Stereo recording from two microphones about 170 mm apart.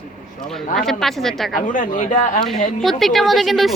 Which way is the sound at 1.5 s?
50° left (ahead or behind).